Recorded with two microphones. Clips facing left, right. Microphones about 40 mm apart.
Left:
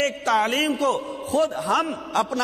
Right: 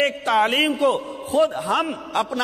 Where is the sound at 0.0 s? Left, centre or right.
Centre.